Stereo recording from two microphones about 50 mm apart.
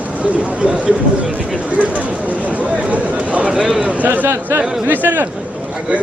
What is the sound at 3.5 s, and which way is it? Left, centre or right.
Speech, centre.